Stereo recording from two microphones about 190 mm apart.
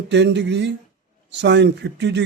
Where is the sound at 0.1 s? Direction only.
65° right (ahead or behind).